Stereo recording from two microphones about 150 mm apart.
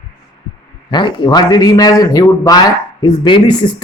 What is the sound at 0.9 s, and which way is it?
A man's voice, 30° left (ahead or behind).